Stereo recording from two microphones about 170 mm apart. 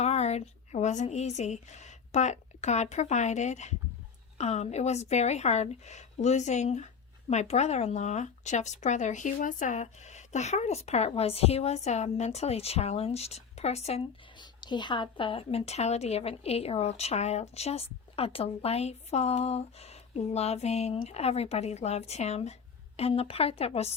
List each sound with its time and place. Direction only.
0.0 s a woman's voice: 40° left (ahead or behind)